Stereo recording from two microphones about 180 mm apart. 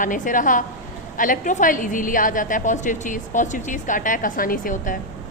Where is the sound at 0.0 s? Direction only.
45° left (ahead or behind).